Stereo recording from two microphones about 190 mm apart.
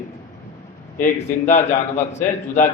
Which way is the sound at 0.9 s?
40° left (ahead or behind).